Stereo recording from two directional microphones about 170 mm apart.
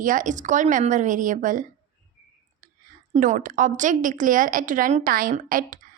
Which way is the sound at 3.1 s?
45° right (ahead or behind).